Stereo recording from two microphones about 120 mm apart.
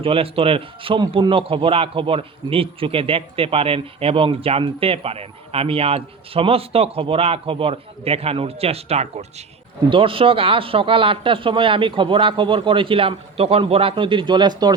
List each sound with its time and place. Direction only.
0.0 s a man's voice: 50° right (ahead or behind)
9.9 s a man's voice: 45° right (ahead or behind)